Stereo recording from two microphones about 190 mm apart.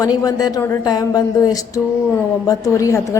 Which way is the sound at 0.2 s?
20° left (ahead or behind).